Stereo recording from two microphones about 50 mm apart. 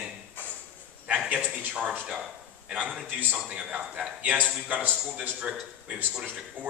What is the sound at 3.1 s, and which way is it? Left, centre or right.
Speech, right.